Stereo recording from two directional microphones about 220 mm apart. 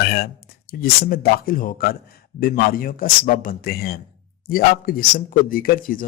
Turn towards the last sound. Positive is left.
turn(degrees=40)  # may be behind; listen again after turning